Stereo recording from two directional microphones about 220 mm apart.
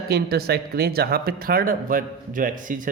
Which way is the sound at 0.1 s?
45° right (ahead or behind).